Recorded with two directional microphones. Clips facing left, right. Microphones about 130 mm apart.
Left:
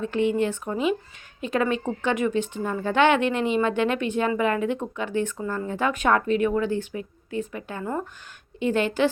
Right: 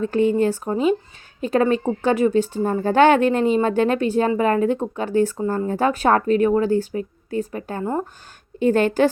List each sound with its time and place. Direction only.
0.0 s a woman's voice: 40° right (ahead or behind)